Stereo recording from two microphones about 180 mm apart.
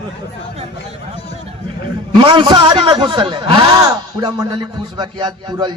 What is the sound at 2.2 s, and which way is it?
Speech, 25° right (ahead or behind).